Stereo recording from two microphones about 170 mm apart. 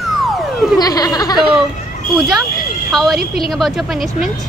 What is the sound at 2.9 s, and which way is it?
Speech, centre (ahead or behind).